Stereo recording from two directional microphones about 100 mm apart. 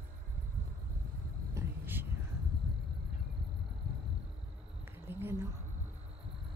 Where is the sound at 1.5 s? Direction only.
25° right (ahead or behind).